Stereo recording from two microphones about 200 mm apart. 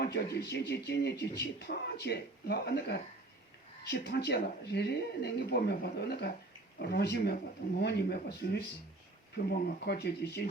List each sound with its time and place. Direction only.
0.0 s speech: 55° left (ahead or behind)